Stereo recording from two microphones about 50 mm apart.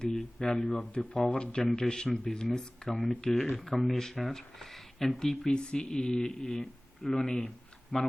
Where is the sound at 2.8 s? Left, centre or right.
Centre.